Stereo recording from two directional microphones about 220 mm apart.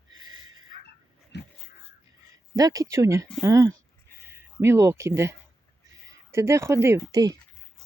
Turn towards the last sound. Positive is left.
turn(degrees=-15)  # may be behind; listen again after turning